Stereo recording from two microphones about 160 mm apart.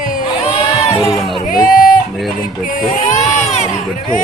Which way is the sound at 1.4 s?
60° left (ahead or behind).